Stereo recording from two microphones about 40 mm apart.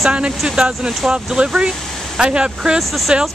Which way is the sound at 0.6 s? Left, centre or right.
Right.